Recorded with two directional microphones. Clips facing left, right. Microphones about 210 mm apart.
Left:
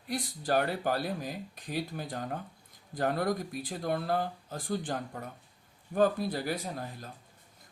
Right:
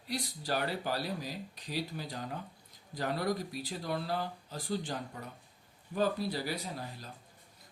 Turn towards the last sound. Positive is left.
turn(degrees=50)  # may be behind; listen again after turning